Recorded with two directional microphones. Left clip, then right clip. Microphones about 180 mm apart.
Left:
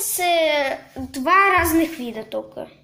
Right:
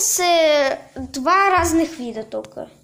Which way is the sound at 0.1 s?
30° right (ahead or behind).